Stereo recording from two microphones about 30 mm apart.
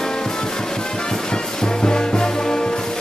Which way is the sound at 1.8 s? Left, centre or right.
Left.